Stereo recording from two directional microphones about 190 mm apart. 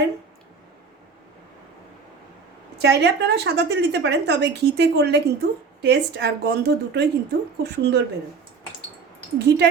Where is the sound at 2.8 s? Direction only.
60° right (ahead or behind).